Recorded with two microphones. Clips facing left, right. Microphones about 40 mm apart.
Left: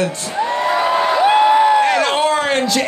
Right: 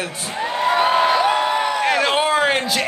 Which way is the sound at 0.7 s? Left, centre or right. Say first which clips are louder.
Right 1 dB; right.